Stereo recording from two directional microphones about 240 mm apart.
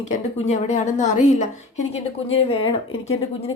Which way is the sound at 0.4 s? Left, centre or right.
Left.